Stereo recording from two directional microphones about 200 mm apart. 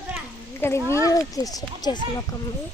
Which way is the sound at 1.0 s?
15° left (ahead or behind).